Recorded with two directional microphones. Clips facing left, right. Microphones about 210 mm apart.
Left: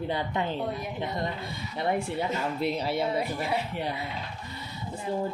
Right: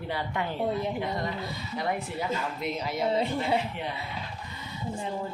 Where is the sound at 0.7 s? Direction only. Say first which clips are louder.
Right 4 dB; 25° right (ahead or behind).